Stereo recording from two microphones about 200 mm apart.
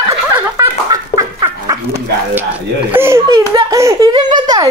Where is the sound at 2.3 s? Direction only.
10° right (ahead or behind).